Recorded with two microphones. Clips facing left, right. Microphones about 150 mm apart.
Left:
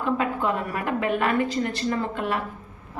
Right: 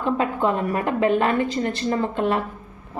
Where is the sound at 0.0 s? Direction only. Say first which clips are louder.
Right 3 dB; 25° right (ahead or behind).